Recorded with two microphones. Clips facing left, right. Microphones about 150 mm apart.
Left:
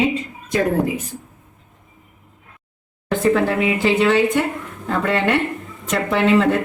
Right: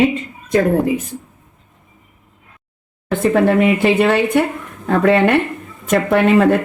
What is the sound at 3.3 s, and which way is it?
A woman's voice, 60° right (ahead or behind).